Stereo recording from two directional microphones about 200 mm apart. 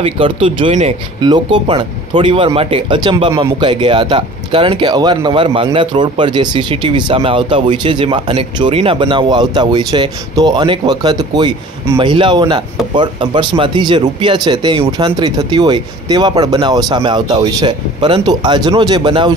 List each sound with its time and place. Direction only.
0.0 s speech: 25° right (ahead or behind)